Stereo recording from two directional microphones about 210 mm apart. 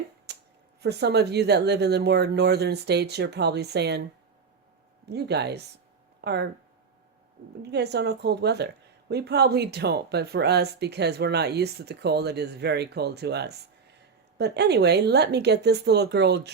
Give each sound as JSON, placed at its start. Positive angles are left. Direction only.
{"t": 0.3, "sound": "a sound", "side_deg": -50}
{"t": 0.8, "sound": "a woman's voice", "side_deg": -50}
{"t": 5.0, "sound": "a woman's voice", "side_deg": -50}
{"t": 7.6, "sound": "a woman's voice", "side_deg": -50}